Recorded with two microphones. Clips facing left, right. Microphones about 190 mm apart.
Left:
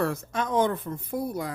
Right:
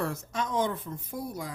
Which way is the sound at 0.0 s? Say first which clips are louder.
Left 4 dB; 60° left (ahead or behind).